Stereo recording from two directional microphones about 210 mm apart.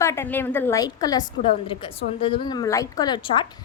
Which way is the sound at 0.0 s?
10° left (ahead or behind).